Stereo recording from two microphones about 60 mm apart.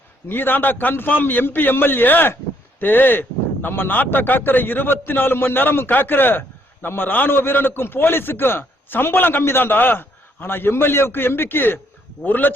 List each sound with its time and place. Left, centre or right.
0.3 s a man's voice: left